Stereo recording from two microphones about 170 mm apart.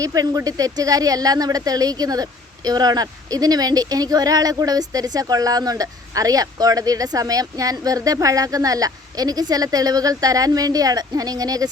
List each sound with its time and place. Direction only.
0.0 s a woman's voice: 20° right (ahead or behind)